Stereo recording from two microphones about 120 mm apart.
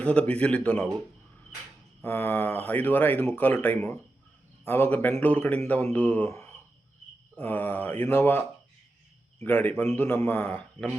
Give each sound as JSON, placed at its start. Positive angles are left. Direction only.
{"t": 0.0, "sound": "speech", "side_deg": 10}
{"t": 2.0, "sound": "speech", "side_deg": 20}